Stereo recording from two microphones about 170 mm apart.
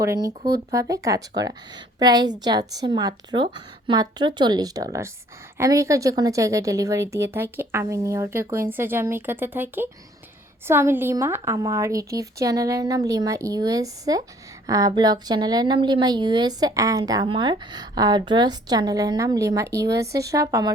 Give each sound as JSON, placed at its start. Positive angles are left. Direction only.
{"t": 0.0, "sound": "a woman's voice", "side_deg": -20}